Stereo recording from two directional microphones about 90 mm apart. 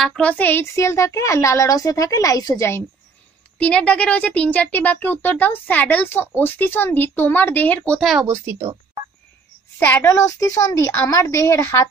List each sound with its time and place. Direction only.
0.2 s speech: 20° left (ahead or behind)
0.7 s a woman's voice: 35° left (ahead or behind)
3.5 s speech: 15° left (ahead or behind)
8.0 s speech: 5° right (ahead or behind)
8.3 s a woman's voice: 30° right (ahead or behind)
9.8 s a child's voice: 20° left (ahead or behind)
10.0 s a woman's voice: 35° left (ahead or behind)